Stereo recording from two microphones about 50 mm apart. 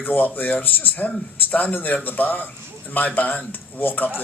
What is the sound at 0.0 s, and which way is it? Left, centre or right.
A man's voice, left.